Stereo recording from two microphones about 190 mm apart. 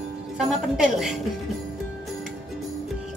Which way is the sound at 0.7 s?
5° right (ahead or behind).